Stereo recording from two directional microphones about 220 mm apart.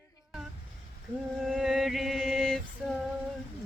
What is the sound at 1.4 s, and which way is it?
Mantra, centre (ahead or behind).